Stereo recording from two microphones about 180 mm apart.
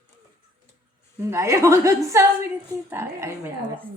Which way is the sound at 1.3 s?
15° right (ahead or behind).